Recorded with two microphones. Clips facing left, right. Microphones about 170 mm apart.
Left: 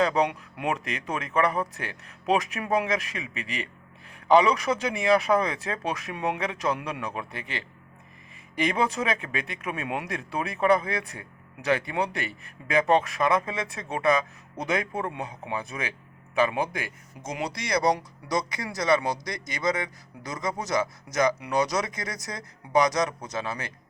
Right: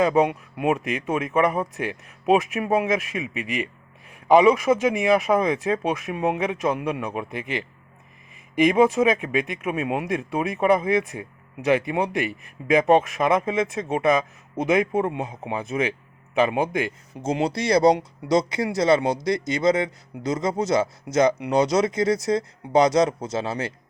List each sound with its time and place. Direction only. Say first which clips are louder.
0.0 s speech: right 4 dB; 10° right (ahead or behind)
8.6 s speech: right 8 dB; 10° right (ahead or behind); by 23.7 s 25° right (ahead or behind)